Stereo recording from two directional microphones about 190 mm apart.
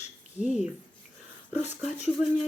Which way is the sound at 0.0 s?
35° left (ahead or behind).